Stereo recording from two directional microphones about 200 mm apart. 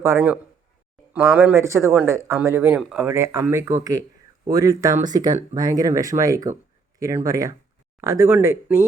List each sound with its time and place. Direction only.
0.0 s speech: 15° right (ahead or behind)